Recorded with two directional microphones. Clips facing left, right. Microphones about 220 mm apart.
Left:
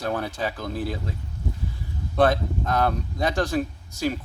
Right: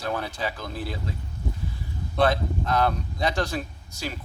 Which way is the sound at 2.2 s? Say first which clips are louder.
Left 2 dB; 50° left (ahead or behind).